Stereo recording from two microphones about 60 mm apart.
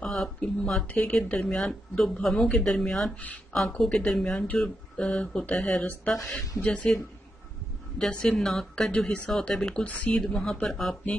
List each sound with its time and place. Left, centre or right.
0.0 s speech: centre
2.5 s speech: centre
8.0 s speech: centre
8.9 s speech: left
10.1 s speech: centre